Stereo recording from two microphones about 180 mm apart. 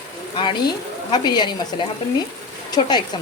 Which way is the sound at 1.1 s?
25° left (ahead or behind).